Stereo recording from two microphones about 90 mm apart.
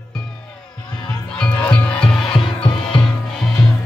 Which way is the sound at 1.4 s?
15° left (ahead or behind).